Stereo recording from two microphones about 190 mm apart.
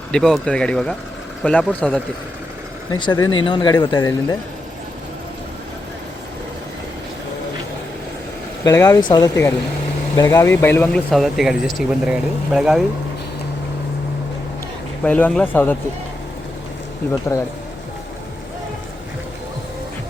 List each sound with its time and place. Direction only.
0.1 s speech: centre (ahead or behind)
2.9 s speech: 20° left (ahead or behind)
8.6 s speech: 20° left (ahead or behind); by 12.8 s 5° right (ahead or behind)
15.0 s speech: 5° left (ahead or behind)
17.3 s speech: 15° left (ahead or behind)